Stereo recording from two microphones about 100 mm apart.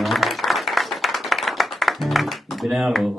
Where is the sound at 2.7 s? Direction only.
Centre (ahead or behind).